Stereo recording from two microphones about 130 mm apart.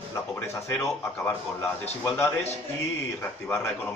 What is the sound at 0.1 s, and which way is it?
Speech, 20° left (ahead or behind).